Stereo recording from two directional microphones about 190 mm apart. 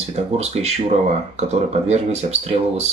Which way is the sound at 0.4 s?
35° right (ahead or behind).